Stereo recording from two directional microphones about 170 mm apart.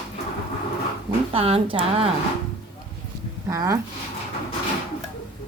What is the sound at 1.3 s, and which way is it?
Speech, 35° right (ahead or behind).